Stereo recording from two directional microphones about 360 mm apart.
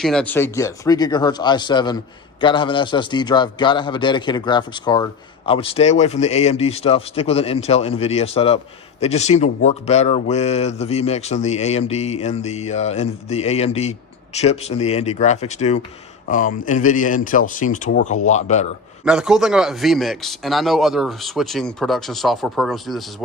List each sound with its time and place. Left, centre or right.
0.0 s speech: centre
19.0 s speech: centre